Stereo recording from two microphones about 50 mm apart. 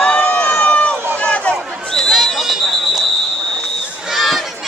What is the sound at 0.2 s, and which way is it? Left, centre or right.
Run, left.